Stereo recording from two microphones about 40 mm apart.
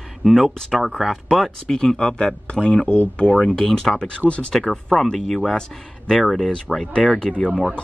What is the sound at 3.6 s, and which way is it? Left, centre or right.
Speech, centre.